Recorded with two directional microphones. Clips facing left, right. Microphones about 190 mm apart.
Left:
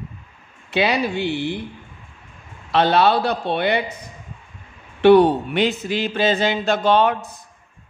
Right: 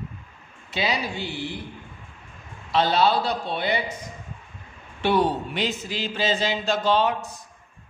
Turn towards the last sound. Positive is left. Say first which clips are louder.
# left 5 dB
turn(degrees=60)  # may be behind; listen again after turning